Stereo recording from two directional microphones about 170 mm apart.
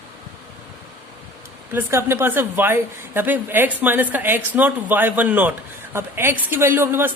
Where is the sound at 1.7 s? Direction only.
15° right (ahead or behind).